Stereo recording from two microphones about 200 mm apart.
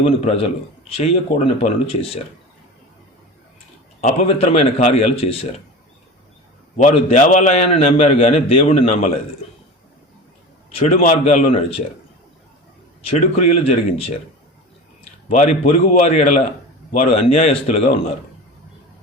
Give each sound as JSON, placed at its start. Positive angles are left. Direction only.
{"t": 0.0, "sound": "a man's voice", "side_deg": 30}
{"t": 4.0, "sound": "a man's voice", "side_deg": 35}
{"t": 6.8, "sound": "a man's voice", "side_deg": 40}
{"t": 10.7, "sound": "a man's voice", "side_deg": 30}
{"t": 13.1, "sound": "a man's voice", "side_deg": 30}